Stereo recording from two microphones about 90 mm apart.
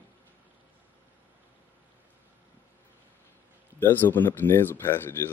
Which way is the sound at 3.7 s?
25° left (ahead or behind).